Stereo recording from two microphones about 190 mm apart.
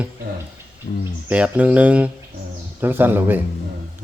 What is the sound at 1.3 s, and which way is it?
Speech, 5° right (ahead or behind).